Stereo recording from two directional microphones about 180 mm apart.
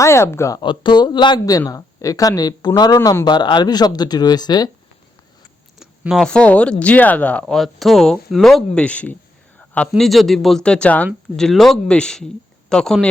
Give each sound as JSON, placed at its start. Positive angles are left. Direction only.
{"t": 0.0, "sound": "speech", "side_deg": 15}
{"t": 5.8, "sound": "speech", "side_deg": 0}
{"t": 9.6, "sound": "a sound", "side_deg": 5}
{"t": 9.9, "sound": "speech", "side_deg": 0}